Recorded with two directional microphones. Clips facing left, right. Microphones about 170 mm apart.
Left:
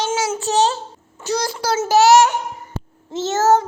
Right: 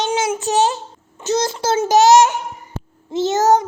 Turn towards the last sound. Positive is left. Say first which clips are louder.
# right 1 dB
turn(degrees=-15)  # may be behind; listen again after turning